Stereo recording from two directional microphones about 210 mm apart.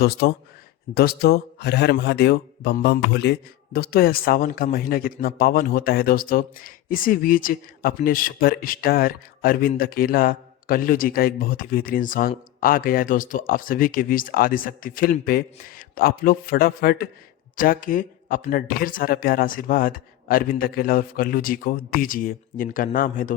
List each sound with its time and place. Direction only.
0.0 s a man's voice: 50° left (ahead or behind)